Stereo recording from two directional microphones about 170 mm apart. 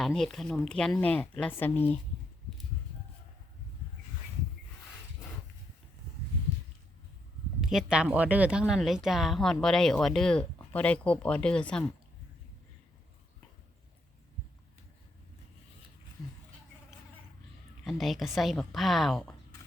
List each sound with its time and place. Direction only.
0.0 s speech: 5° left (ahead or behind)
7.6 s speech: 5° right (ahead or behind)
17.8 s speech: centre (ahead or behind)